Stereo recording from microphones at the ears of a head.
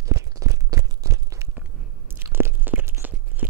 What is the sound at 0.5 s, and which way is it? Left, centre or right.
Crunch, right.